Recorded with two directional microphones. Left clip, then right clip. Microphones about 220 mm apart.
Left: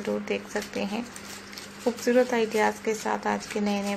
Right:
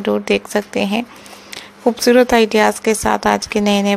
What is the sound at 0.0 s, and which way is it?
A woman's voice, 40° right (ahead or behind).